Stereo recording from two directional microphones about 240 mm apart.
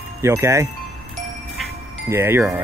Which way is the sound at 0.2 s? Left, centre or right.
Centre.